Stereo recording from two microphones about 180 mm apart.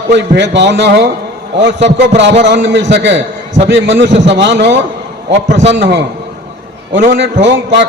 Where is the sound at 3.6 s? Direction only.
90° right; by 4.7 s 75° right (ahead or behind).